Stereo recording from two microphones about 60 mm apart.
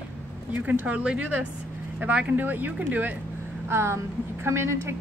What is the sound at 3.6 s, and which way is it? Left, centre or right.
A woman's voice, right.